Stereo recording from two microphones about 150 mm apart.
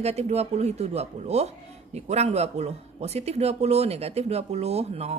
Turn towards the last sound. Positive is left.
turn(degrees=-45)  # may be behind; listen again after turning